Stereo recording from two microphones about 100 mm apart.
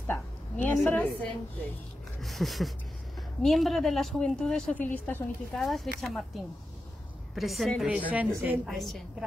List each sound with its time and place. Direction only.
0.0 s a sound: 20° left (ahead or behind)
2.2 s a woman's voice: centre (ahead or behind)
4.7 s a woman's voice: 15° left (ahead or behind)
5.5 s a woman's voice: centre (ahead or behind)
8.1 s speech: 15° right (ahead or behind)
8.6 s a woman's voice: centre (ahead or behind)